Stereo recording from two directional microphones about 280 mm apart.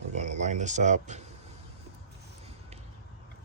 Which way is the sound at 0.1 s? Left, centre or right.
Right.